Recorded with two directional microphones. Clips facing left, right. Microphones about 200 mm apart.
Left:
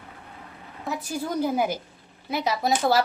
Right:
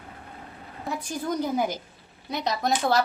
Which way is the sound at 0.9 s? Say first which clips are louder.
Even; 5° left (ahead or behind).